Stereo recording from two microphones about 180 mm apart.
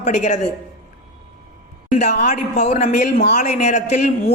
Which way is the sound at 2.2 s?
40° left (ahead or behind).